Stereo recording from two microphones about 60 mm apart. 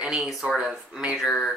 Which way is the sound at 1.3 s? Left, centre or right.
Centre.